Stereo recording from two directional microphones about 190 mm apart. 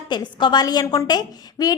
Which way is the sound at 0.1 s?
25° left (ahead or behind).